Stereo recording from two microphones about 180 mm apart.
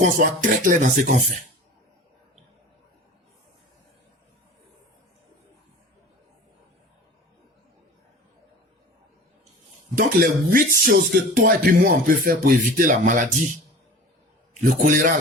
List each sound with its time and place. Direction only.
0.0 s speech: 50° right (ahead or behind)
9.9 s speech: 50° right (ahead or behind)
14.8 s speech: 45° right (ahead or behind)